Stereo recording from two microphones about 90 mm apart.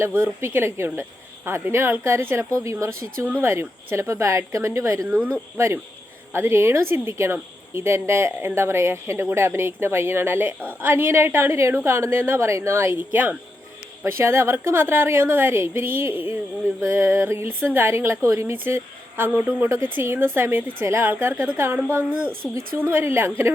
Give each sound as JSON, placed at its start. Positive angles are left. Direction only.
{"t": 0.4, "sound": "a woman's voice", "side_deg": -30}
{"t": 5.0, "sound": "speech", "side_deg": -20}
{"t": 5.5, "sound": "speech", "side_deg": -30}
{"t": 13.1, "sound": "a woman's voice", "side_deg": -20}